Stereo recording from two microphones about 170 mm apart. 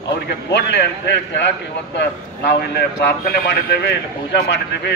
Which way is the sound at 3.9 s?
85° left.